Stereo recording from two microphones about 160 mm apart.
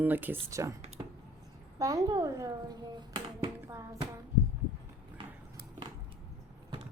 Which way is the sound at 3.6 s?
15° right (ahead or behind).